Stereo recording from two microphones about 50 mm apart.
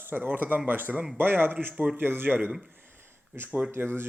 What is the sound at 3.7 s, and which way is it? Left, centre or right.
Speech, right.